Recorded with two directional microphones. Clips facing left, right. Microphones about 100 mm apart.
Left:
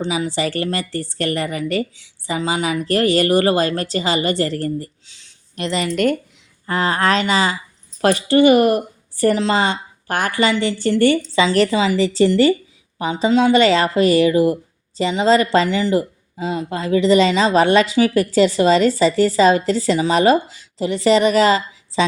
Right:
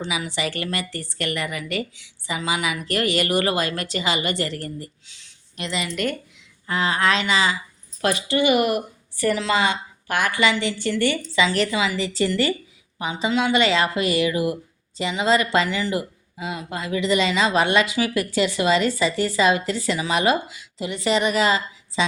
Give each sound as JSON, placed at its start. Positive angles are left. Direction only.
{"t": 0.0, "sound": "a woman's voice", "side_deg": 35}